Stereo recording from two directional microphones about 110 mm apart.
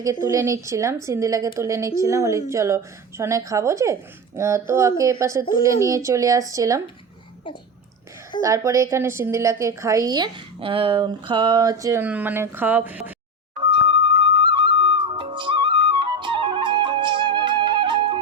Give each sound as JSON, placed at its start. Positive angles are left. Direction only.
{"t": 0.0, "sound": "speech", "side_deg": -30}
{"t": 8.4, "sound": "speech", "side_deg": -30}
{"t": 10.6, "sound": "speech", "side_deg": -55}
{"t": 12.0, "sound": "speech", "side_deg": -15}
{"t": 13.7, "sound": "music", "side_deg": -45}